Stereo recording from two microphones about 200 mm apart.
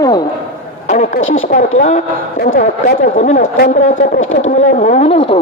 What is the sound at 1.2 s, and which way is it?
Speech, 80° left.